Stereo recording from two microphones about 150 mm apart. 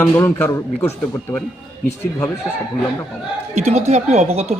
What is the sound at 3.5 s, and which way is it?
Speech, 50° right (ahead or behind).